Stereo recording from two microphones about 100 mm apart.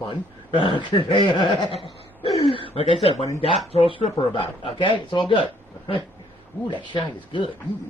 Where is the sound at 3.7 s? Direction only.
70° left (ahead or behind).